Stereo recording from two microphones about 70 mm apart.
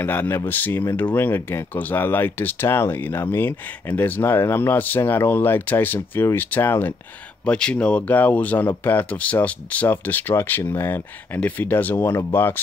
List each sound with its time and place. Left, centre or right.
0.0 s speech: left
7.4 s speech: centre; by 12.5 s left